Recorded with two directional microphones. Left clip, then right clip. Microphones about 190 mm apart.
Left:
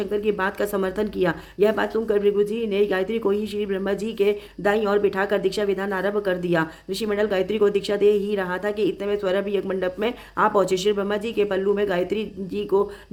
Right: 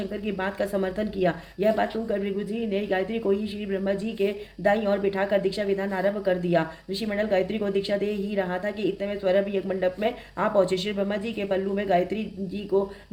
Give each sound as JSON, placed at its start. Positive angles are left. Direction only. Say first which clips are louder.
{"t": 0.0, "sound": "speech", "louder": "left 7 dB", "side_deg": 40}